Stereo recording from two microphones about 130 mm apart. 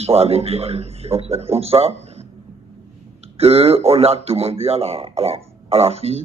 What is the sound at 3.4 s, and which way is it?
Speech, 50° right (ahead or behind).